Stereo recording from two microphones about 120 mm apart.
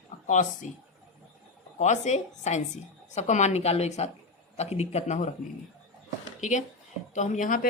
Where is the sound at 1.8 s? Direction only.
75° left (ahead or behind).